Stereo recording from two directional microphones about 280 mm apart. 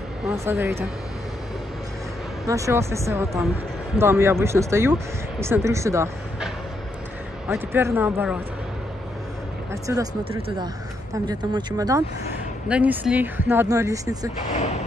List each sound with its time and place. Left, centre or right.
0.3 s speech: centre
2.4 s speech: centre
9.7 s speech: centre
14.5 s a sound: left